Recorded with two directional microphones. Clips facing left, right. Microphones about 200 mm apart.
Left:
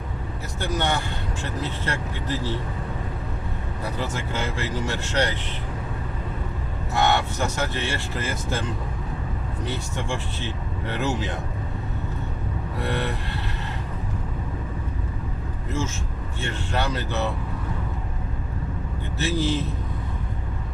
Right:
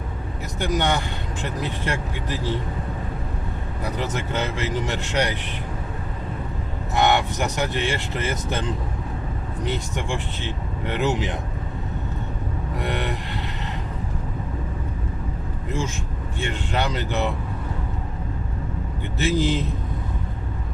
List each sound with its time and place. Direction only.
0.6 s speech: 15° right (ahead or behind)
3.9 s speech: 20° right (ahead or behind)
6.9 s speech: 15° right (ahead or behind)
9.6 s speech: 15° right (ahead or behind)
12.8 s speech: 15° right (ahead or behind)
16.4 s speech: 15° right (ahead or behind)
19.2 s speech: 15° right (ahead or behind)